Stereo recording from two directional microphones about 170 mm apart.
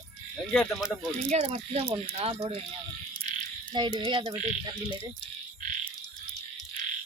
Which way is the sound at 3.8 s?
25° right (ahead or behind).